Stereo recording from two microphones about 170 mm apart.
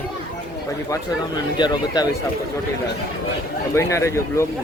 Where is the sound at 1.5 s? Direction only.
25° left (ahead or behind).